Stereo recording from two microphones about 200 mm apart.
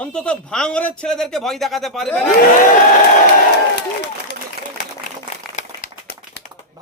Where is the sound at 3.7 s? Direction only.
55° left (ahead or behind).